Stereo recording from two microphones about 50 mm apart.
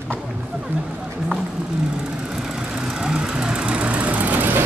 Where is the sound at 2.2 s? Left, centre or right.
Centre; by 4.6 s right.